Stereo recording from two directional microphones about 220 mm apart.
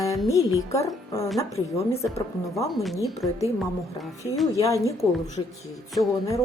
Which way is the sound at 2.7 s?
Centre (ahead or behind).